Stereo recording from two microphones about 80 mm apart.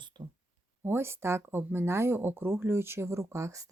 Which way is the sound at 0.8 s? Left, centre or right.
Right.